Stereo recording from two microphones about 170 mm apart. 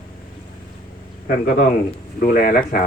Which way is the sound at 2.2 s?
55° left (ahead or behind).